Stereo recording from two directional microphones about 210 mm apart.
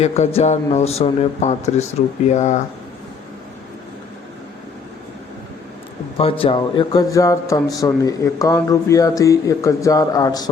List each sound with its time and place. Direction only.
0.0 s speech: 30° left (ahead or behind)
6.1 s speech: 25° left (ahead or behind)